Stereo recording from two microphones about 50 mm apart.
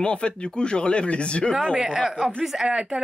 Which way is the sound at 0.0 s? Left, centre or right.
Left.